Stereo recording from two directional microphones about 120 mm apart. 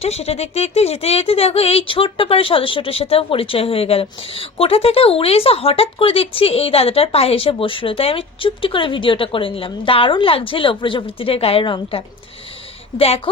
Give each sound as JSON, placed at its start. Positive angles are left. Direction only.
{"t": 0.0, "sound": "speech", "side_deg": 60}